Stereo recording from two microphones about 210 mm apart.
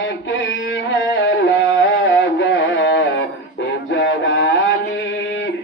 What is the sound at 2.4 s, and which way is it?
Music, 65° left (ahead or behind).